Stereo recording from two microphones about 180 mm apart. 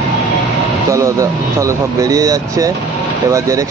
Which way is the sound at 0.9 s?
15° right (ahead or behind).